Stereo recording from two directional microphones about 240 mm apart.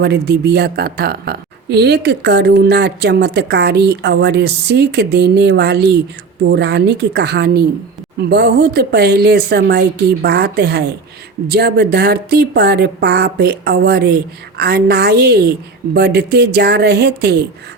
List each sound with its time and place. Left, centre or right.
0.0 s a woman's voice: right